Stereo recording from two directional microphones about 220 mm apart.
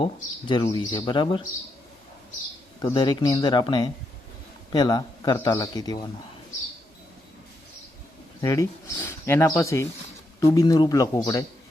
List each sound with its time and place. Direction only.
0.0 s speech: 20° left (ahead or behind)
2.8 s speech: 20° left (ahead or behind)
8.4 s speech: 15° left (ahead or behind)